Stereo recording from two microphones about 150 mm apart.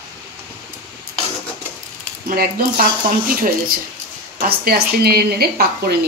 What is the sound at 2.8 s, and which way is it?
A woman's voice, 70° right (ahead or behind).